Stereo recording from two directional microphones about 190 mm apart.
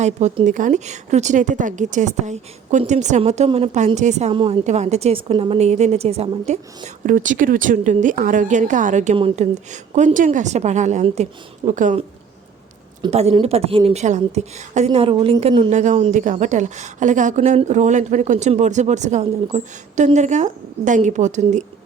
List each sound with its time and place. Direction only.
0.0 s a woman's voice: 35° right (ahead or behind)